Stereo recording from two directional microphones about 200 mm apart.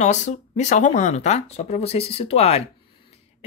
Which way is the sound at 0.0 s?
35° left (ahead or behind).